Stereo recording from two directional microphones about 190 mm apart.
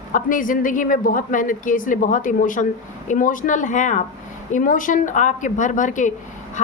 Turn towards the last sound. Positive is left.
turn(degrees=40)  # may be behind; listen again after turning